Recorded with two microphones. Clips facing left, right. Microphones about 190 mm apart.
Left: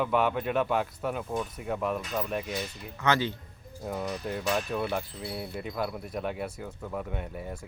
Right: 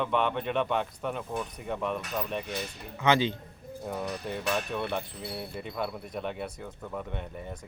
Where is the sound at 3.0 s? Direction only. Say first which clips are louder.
Right 2 dB; 20° right (ahead or behind).